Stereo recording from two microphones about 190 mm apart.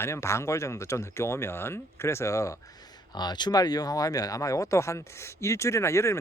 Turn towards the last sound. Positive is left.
turn(degrees=15)  # may be behind; listen again after turning